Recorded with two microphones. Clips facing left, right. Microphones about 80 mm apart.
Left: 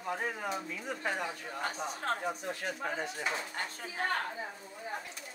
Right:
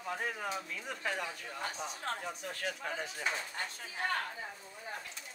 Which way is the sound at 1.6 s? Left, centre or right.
Left.